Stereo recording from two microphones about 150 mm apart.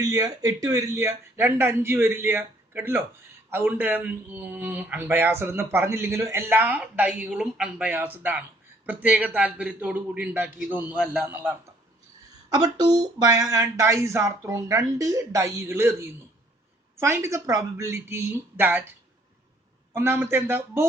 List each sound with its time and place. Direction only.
0.0 s speech: 25° right (ahead or behind)
12.5 s speech: 25° right (ahead or behind)
19.9 s speech: 15° right (ahead or behind)